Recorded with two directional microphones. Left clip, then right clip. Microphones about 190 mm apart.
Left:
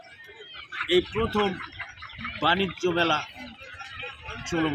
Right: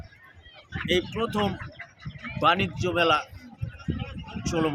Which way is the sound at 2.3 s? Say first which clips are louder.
Right 1 dB; 10° right (ahead or behind).